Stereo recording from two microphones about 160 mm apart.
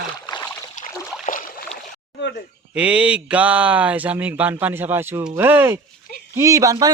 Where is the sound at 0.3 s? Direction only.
25° left (ahead or behind).